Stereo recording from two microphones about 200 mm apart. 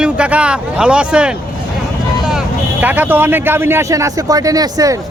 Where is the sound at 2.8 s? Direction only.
10° right (ahead or behind).